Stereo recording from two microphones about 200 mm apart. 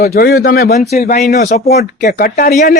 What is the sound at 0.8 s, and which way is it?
A man's voice, 35° left (ahead or behind).